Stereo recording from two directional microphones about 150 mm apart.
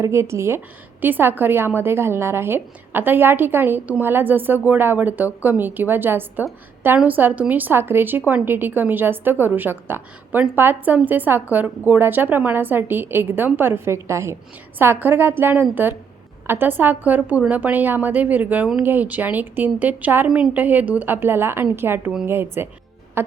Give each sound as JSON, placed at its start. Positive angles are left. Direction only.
{"t": 0.0, "sound": "a woman's voice", "side_deg": -20}
{"t": 23.2, "sound": "music", "side_deg": -15}